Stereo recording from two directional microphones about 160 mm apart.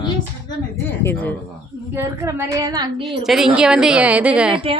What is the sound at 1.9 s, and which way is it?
A woman's voice, 15° right (ahead or behind).